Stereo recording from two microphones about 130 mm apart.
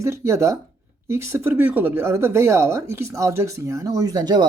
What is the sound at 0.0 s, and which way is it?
Speech, 20° right (ahead or behind).